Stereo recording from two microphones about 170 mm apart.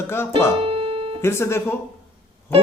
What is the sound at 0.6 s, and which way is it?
Music, 30° right (ahead or behind).